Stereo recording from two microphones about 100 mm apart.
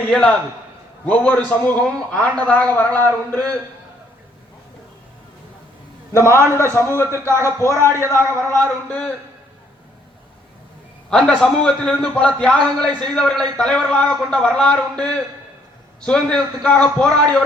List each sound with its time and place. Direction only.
1.0 s a man's voice: 15° left (ahead or behind)
6.1 s speech: 25° left (ahead or behind)
11.1 s a man's voice: 5° left (ahead or behind)